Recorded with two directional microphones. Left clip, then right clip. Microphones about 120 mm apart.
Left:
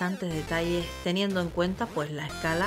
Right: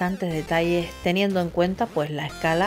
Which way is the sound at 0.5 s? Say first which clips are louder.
Right 7 dB; 25° right (ahead or behind).